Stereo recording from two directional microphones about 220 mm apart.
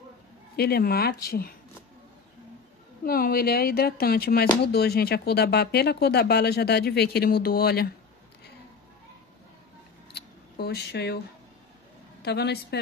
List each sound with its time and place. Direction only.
0.6 s speech: 45° left (ahead or behind)
3.1 s speech: 45° left (ahead or behind)
10.1 s a sound: 45° left (ahead or behind)
12.2 s a woman's voice: 50° left (ahead or behind)